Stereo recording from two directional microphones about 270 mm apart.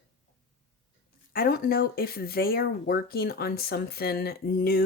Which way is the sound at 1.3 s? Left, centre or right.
Left.